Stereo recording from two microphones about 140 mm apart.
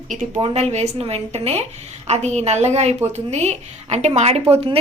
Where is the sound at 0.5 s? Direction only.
50° right (ahead or behind).